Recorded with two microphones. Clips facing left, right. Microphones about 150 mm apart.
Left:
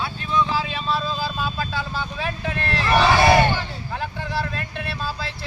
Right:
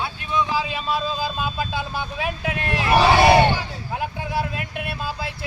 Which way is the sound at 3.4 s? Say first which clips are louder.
Right 2 dB; 15° right (ahead or behind).